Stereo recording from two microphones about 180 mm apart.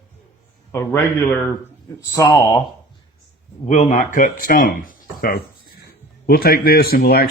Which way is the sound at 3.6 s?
40° left (ahead or behind).